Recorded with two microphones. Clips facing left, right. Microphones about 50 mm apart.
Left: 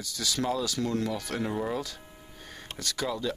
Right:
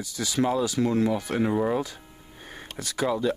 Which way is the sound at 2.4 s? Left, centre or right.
Right.